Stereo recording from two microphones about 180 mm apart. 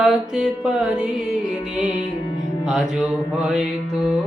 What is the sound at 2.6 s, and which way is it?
Music, 5° right (ahead or behind).